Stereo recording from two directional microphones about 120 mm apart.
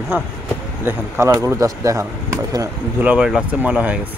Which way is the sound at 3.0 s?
10° right (ahead or behind).